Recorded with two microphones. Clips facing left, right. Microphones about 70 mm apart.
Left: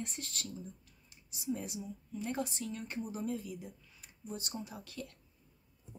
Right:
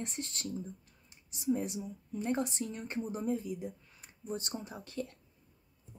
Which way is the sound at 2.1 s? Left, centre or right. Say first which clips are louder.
Right 4 dB; right.